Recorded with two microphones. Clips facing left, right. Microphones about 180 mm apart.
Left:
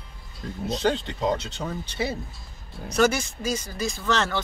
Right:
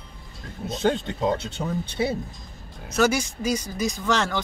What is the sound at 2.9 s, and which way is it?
Speech, 5° right (ahead or behind).